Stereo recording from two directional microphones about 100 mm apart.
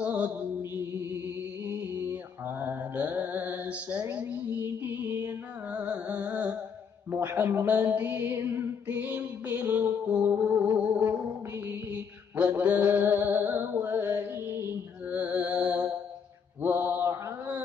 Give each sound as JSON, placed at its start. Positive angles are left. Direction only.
{"t": 0.0, "sound": "music", "side_deg": -15}
{"t": 1.7, "sound": "mantra", "side_deg": -20}
{"t": 7.1, "sound": "music", "side_deg": -25}
{"t": 11.9, "sound": "mantra", "side_deg": -15}